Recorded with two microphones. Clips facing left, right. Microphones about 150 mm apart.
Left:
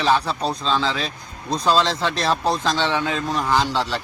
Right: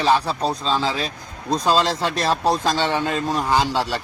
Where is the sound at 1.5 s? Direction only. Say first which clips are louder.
Even; 40° right (ahead or behind).